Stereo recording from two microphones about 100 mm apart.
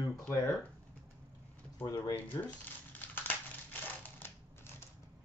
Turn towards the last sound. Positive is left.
turn(degrees=20)  # may be behind; listen again after turning